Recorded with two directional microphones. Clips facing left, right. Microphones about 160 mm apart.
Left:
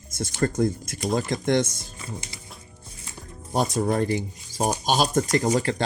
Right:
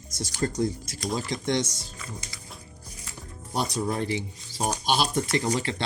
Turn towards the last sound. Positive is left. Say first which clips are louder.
# left 4 dB
turn(degrees=45)  # may be behind; listen again after turning